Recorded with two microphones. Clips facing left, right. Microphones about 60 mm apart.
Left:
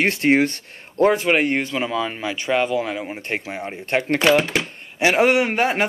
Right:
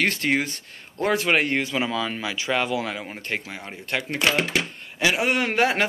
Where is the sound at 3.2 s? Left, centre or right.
Left.